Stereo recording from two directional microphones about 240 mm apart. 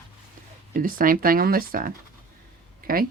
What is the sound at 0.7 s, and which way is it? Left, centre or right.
Speech, right.